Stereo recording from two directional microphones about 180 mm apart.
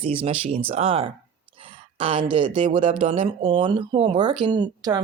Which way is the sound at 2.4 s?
30° right (ahead or behind).